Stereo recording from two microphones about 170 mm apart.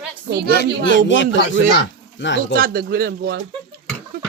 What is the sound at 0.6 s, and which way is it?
A man's voice, 90° left.